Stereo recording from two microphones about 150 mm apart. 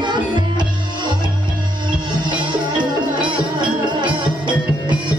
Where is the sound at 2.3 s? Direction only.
30° right (ahead or behind).